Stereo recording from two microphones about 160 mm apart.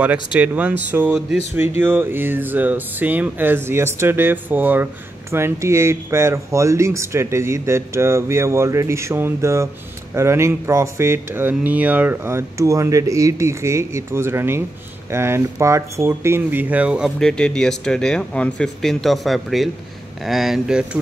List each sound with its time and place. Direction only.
0.0 s speech: 10° right (ahead or behind)
17.2 s speech: 5° left (ahead or behind)